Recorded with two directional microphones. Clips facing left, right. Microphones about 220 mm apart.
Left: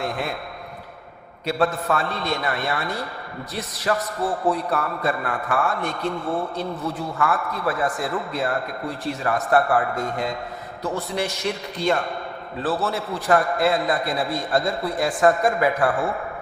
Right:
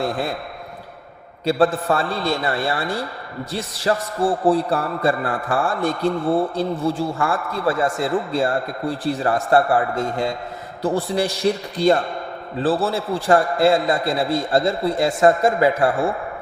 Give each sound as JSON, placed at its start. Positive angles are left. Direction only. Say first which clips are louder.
{"t": 1.5, "sound": "a man's voice", "louder": "right 4 dB", "side_deg": -30}